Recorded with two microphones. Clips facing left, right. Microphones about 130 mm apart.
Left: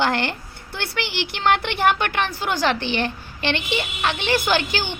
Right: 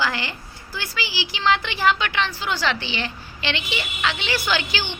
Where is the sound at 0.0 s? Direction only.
60° left (ahead or behind).